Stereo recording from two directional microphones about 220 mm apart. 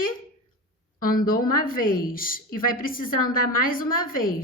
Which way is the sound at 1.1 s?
40° left (ahead or behind).